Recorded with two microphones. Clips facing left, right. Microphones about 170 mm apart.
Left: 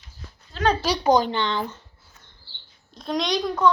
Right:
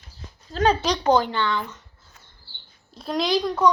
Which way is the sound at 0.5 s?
40° right (ahead or behind).